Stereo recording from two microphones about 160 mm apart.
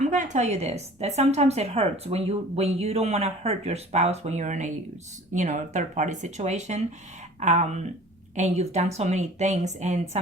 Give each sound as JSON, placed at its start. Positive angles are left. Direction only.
{"t": 0.0, "sound": "a woman's voice", "side_deg": -50}